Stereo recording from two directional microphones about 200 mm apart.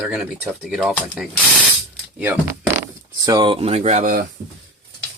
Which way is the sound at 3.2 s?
20° right (ahead or behind).